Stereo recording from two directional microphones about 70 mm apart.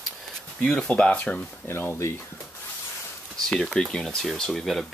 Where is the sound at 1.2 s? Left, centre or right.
Centre.